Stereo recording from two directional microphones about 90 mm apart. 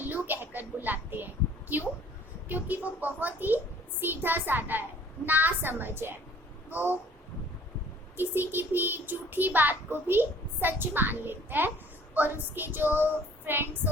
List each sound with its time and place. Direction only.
0.0 s speech: 20° right (ahead or behind)
2.5 s a child's voice: 20° right (ahead or behind)
8.1 s a child's voice: 25° right (ahead or behind)